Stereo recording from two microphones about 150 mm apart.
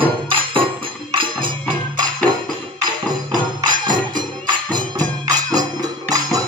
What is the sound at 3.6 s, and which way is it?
Music, 30° right (ahead or behind).